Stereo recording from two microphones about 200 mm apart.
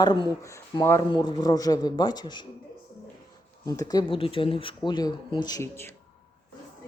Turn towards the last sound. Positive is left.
turn(degrees=15)  # may be behind; listen again after turning